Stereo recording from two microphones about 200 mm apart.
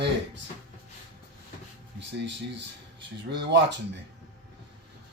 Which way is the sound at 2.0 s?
60° right (ahead or behind).